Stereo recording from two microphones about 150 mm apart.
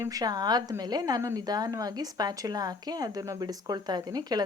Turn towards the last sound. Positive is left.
turn(degrees=-25)  # may be behind; listen again after turning